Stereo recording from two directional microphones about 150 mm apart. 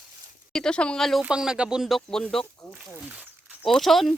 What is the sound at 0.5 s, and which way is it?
Speech, 5° left (ahead or behind).